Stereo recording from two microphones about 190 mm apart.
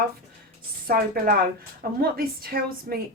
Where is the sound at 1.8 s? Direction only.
50° right (ahead or behind).